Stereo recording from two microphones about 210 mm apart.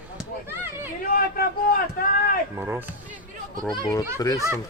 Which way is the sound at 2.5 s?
10° right (ahead or behind).